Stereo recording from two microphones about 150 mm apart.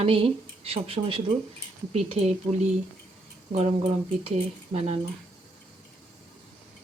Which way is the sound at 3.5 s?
40° right (ahead or behind).